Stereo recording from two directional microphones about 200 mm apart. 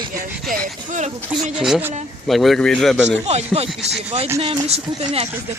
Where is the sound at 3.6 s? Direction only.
30° right (ahead or behind).